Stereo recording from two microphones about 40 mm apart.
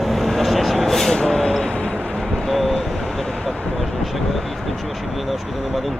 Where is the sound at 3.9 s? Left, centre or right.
Centre.